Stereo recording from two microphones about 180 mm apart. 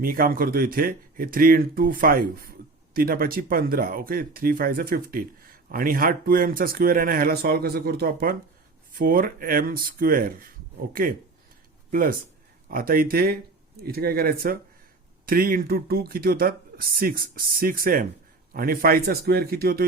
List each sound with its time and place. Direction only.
0.0 s a man's voice: 55° right (ahead or behind)